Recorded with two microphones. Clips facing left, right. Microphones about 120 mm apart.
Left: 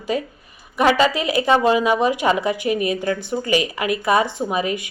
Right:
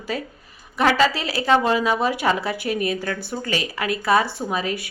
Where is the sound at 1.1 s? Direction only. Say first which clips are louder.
Left 6 dB; 35° right (ahead or behind).